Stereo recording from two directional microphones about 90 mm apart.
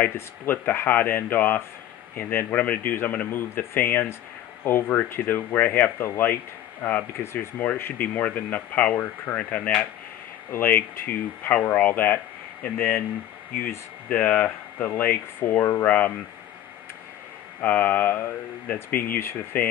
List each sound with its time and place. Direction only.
0.0 s speech: 20° left (ahead or behind)
17.6 s speech: 20° left (ahead or behind)